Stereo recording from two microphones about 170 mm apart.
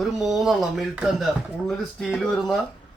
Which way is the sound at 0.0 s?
Centre (ahead or behind).